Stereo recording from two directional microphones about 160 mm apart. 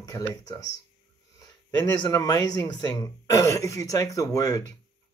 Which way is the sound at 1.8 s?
20° left (ahead or behind).